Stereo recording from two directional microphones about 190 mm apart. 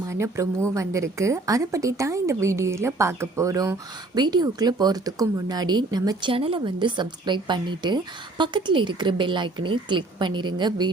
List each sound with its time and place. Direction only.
0.1 s a woman's voice: 15° right (ahead or behind)